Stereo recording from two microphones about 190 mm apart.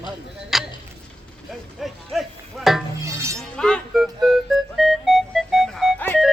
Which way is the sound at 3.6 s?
Centre (ahead or behind).